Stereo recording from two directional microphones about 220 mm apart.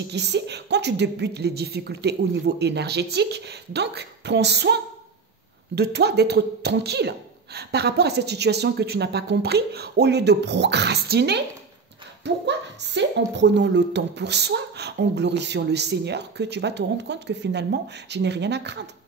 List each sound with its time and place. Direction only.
0.1 s speech: 50° right (ahead or behind)
12.4 s speech: 50° right (ahead or behind)